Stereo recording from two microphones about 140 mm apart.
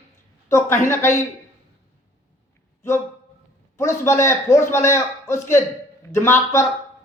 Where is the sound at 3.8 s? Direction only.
20° left (ahead or behind).